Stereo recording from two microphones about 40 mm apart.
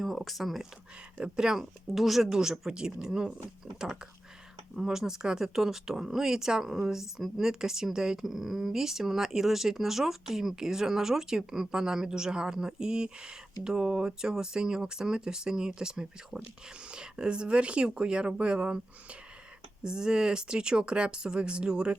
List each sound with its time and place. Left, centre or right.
0.0 s speech: centre
1.2 s speech: centre
1.9 s speech: centre
4.7 s speech: centre; by 18.8 s right
19.8 s speech: centre